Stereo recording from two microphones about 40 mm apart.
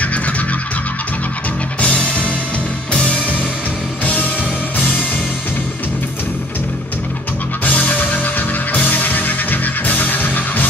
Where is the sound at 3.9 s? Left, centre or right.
Left.